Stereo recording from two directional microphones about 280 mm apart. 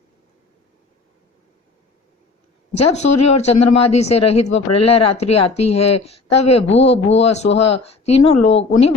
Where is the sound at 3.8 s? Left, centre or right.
Left.